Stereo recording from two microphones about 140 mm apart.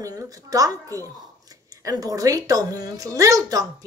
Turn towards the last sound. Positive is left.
turn(degrees=-25)  # may be behind; listen again after turning